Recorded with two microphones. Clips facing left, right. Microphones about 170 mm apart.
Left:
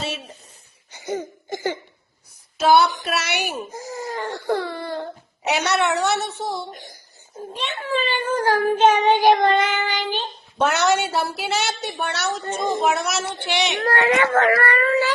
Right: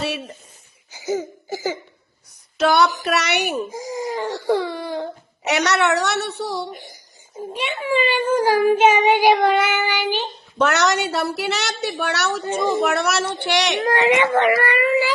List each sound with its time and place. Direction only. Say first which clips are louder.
0.0 s speech: right 4 dB; 65° right (ahead or behind)
0.9 s cough: right 3 dB; 10° right (ahead or behind)
2.6 s a woman's voice: left 1 dB; 60° right (ahead or behind)
3.7 s speech: right 4 dB; 10° right (ahead or behind)
5.5 s a woman's voice: right 2 dB; 70° right (ahead or behind)
6.7 s a child's voice: right 1 dB; 10° right (ahead or behind)
10.6 s a woman's voice: even; 65° right (ahead or behind)
13.8 s a child's voice: right 1 dB; 20° right (ahead or behind)